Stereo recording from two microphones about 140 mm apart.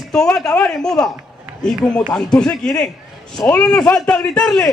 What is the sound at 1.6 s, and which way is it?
A man's voice, 5° left (ahead or behind).